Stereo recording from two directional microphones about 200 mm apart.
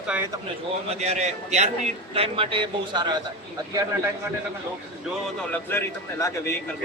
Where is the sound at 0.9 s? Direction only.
35° right (ahead or behind).